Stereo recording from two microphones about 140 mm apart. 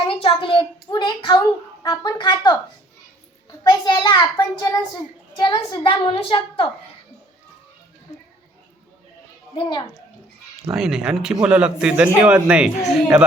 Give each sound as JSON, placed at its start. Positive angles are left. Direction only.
{"t": 0.1, "sound": "a child's voice", "side_deg": 40}
{"t": 3.6, "sound": "a child's voice", "side_deg": 30}
{"t": 5.4, "sound": "a child's voice", "side_deg": 35}
{"t": 9.6, "sound": "a child's voice", "side_deg": 35}
{"t": 10.7, "sound": "a man's voice", "side_deg": -5}